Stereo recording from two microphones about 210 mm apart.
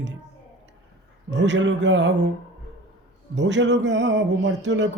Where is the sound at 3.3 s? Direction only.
60° right (ahead or behind).